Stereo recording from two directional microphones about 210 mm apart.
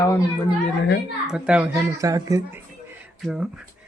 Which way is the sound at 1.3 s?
5° right (ahead or behind).